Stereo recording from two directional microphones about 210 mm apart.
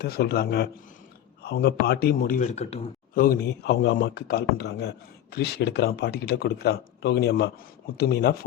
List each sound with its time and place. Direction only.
0.0 s a man's voice: 50° left (ahead or behind); by 3.2 s 30° left (ahead or behind)
3.2 s speech: 50° left (ahead or behind)